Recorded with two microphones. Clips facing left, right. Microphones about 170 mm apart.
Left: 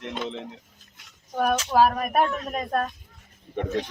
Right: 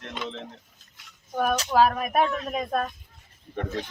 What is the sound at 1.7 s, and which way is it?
Speech, 5° left (ahead or behind).